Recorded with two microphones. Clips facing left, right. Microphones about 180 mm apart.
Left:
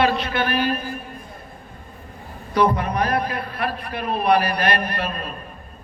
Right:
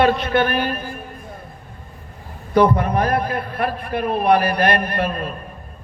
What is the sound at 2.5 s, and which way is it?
A man's voice, 50° right (ahead or behind).